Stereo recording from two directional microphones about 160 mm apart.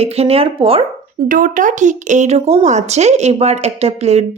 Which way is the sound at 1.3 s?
60° right (ahead or behind).